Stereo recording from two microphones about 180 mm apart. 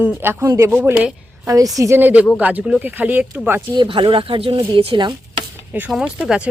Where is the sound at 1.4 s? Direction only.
20° right (ahead or behind).